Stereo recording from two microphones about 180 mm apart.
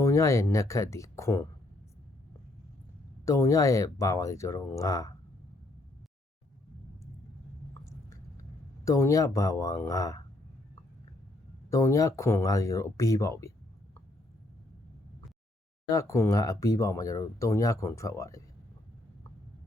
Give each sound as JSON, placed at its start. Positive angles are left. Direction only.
{"t": 0.0, "sound": "speech", "side_deg": 15}
{"t": 3.2, "sound": "speech", "side_deg": 15}
{"t": 8.1, "sound": "speech", "side_deg": 15}
{"t": 11.7, "sound": "speech", "side_deg": 15}
{"t": 15.9, "sound": "speech", "side_deg": 15}